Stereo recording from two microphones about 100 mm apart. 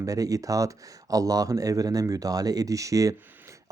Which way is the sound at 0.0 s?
35° right (ahead or behind).